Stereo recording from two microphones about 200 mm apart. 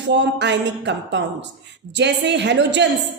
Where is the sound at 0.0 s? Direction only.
60° right (ahead or behind).